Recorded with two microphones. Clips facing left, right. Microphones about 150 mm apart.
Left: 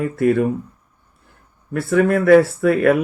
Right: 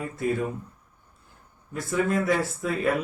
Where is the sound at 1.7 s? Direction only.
65° left (ahead or behind).